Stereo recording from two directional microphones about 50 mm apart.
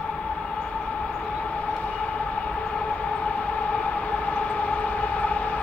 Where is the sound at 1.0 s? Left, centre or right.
Left.